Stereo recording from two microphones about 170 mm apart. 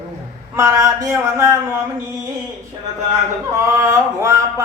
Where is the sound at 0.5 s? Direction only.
20° right (ahead or behind).